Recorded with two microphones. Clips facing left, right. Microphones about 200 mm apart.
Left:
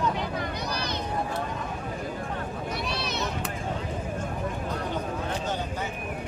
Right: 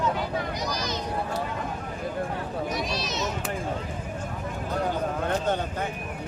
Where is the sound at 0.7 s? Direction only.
60° left (ahead or behind).